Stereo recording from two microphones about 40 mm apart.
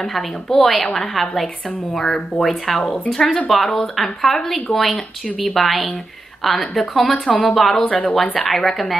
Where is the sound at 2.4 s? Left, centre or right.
Centre.